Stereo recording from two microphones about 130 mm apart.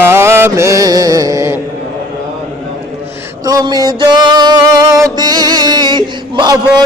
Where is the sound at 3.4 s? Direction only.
30° right (ahead or behind).